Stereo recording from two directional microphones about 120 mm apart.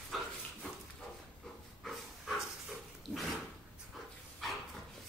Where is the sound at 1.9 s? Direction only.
Centre (ahead or behind).